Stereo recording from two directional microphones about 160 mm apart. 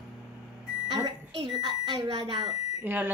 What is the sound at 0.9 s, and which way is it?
Speech, 30° right (ahead or behind).